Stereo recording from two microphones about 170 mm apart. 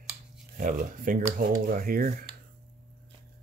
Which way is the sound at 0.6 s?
55° right (ahead or behind).